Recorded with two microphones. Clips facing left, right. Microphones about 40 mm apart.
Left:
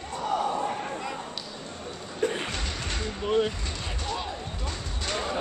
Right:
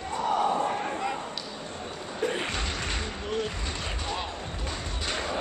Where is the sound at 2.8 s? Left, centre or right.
Centre.